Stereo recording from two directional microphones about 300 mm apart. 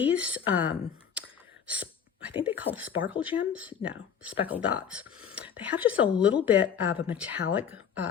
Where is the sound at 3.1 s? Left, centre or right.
Centre.